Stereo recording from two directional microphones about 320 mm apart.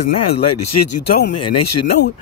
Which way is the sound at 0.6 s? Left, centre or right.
Left.